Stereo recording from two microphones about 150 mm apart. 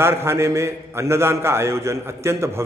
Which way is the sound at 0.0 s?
15° right (ahead or behind).